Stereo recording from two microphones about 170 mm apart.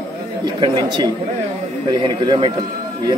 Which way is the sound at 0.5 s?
25° right (ahead or behind).